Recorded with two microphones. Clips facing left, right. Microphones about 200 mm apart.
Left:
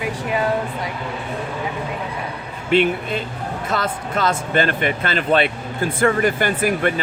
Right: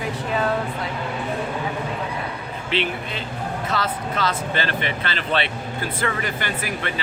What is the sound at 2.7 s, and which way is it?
Speech, 50° left (ahead or behind).